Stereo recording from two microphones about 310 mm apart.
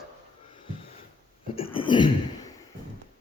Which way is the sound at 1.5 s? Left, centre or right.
Centre.